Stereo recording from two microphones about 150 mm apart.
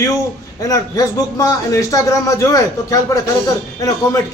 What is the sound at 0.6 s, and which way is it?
A man's voice, 25° left (ahead or behind).